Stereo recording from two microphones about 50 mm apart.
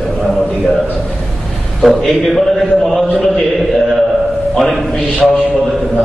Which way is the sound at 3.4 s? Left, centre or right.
Centre.